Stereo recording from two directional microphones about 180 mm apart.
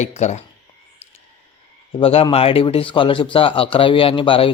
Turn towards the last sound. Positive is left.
turn(degrees=30)  # may be behind; listen again after turning